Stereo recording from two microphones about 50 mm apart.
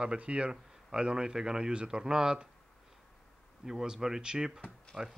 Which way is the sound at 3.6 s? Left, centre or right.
Centre.